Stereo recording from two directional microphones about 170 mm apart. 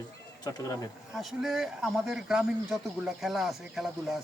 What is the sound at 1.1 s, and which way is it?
Speech, centre (ahead or behind).